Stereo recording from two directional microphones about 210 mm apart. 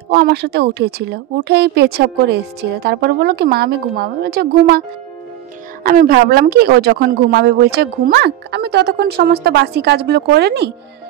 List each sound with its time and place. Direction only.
0.1 s speech: 50° right (ahead or behind)
5.9 s speech: 45° right (ahead or behind)